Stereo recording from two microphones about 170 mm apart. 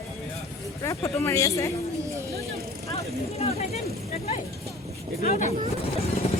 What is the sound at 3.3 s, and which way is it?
Speech, 35° left (ahead or behind).